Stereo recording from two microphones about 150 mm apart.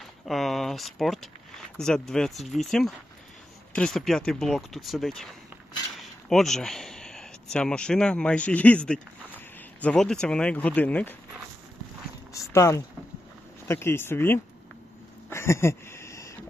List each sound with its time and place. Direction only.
0.3 s speech: centre (ahead or behind)
12.3 s speech: 20° left (ahead or behind)
15.3 s a sound: 15° left (ahead or behind)